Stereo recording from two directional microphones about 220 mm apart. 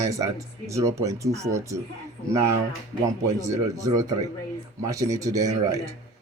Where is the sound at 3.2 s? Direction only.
15° right (ahead or behind).